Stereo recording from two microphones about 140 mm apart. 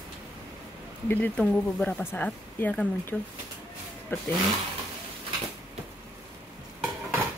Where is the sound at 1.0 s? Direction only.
10° left (ahead or behind).